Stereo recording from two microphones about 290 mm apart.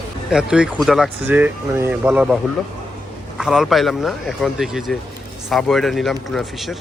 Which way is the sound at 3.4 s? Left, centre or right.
Centre.